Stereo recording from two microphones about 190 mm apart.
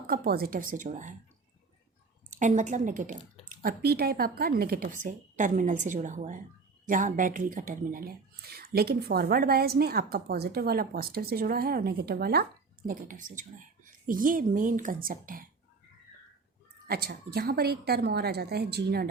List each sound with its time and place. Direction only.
0.1 s speech: 50° right (ahead or behind)
2.3 s a woman's voice: 40° right (ahead or behind)
16.8 s a woman's voice: 55° right (ahead or behind)